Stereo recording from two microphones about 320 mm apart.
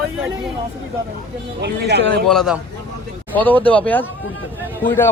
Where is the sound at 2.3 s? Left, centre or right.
Centre.